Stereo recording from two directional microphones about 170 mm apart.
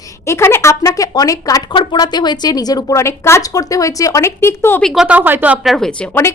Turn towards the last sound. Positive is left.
turn(degrees=5)  # may be behind; listen again after turning